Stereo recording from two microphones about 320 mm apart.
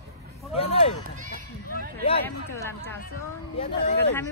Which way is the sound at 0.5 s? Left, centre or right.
Centre.